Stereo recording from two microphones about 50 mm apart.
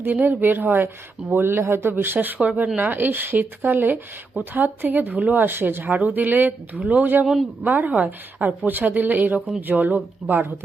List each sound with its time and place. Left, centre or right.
0.0 s speech: right
1.3 s speech: right
2.1 s speech: right